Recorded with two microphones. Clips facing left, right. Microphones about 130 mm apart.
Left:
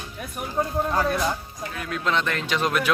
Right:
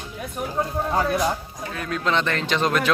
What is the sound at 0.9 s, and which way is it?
Speech, 20° right (ahead or behind).